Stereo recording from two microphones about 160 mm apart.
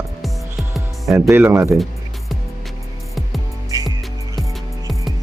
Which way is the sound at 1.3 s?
15° right (ahead or behind).